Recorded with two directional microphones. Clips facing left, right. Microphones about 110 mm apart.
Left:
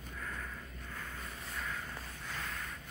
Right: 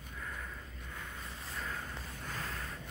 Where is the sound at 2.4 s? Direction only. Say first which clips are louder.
Left 1 dB; 35° right (ahead or behind).